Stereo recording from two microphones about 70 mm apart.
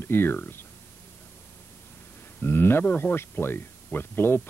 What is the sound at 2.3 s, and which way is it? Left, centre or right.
Speech, left.